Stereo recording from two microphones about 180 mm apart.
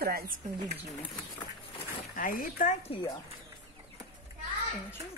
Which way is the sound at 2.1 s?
50° left (ahead or behind).